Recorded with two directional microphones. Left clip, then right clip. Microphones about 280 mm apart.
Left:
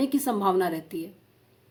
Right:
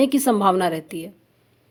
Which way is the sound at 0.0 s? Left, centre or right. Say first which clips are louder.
Right 7 dB; right.